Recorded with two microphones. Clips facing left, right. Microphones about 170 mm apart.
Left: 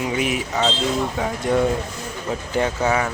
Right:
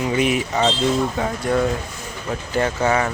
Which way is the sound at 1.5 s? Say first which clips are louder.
Left 1 dB; 20° left (ahead or behind).